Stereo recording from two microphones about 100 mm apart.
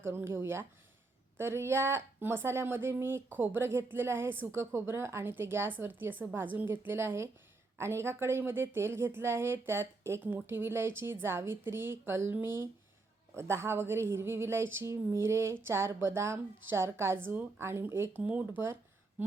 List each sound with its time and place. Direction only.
0.0 s speech: 25° right (ahead or behind)